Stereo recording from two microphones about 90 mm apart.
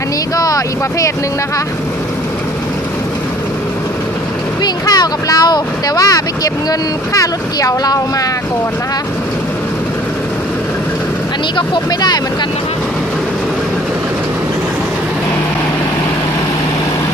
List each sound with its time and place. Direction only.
0.3 s speech: 40° left (ahead or behind)
4.6 s speech: 50° left (ahead or behind)
11.5 s speech: 55° left (ahead or behind)